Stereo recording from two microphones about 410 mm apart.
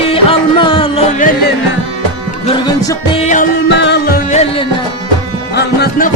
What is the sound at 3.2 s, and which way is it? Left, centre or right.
Music, left.